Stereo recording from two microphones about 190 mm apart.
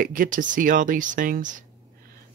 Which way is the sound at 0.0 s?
45° right (ahead or behind).